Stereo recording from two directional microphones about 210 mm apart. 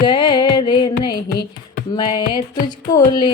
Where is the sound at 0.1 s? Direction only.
20° left (ahead or behind).